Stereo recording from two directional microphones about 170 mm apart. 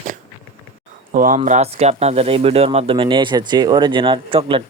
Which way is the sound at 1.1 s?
50° right (ahead or behind).